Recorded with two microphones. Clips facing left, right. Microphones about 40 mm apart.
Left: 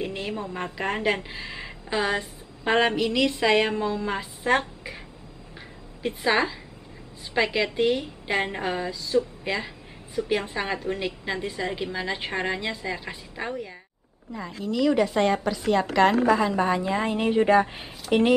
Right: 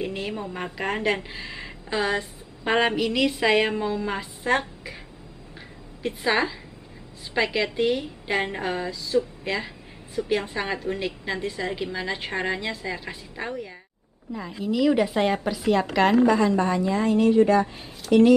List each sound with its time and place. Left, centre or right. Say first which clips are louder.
0.0 s a woman's voice: right 1 dB; centre
6.0 s a woman's voice: even; centre
16.5 s a woman's voice: right 1 dB; centre